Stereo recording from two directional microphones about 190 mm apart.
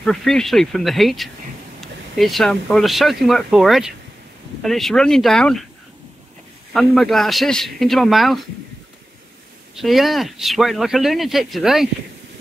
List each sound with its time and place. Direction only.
0.0 s speech: 5° left (ahead or behind)
6.7 s speech: centre (ahead or behind)
9.8 s speech: centre (ahead or behind)